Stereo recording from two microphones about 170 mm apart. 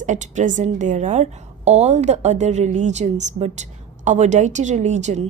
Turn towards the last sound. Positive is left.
turn(degrees=-40)  # may be behind; listen again after turning